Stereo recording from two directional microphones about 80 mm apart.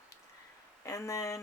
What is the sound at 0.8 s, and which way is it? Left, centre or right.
Speech, left.